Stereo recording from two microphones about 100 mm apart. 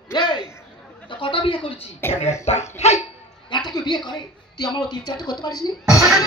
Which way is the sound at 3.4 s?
45° left (ahead or behind).